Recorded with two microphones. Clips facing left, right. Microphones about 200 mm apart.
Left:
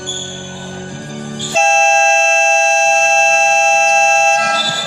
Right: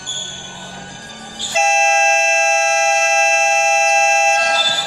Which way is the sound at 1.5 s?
30° left (ahead or behind).